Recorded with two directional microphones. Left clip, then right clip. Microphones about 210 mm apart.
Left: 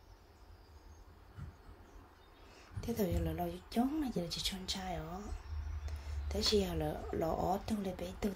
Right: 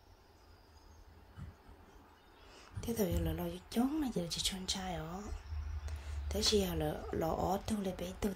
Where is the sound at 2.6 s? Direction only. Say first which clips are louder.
Right 1 dB; 20° right (ahead or behind).